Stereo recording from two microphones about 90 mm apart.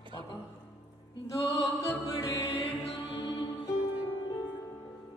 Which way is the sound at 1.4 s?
35° left (ahead or behind).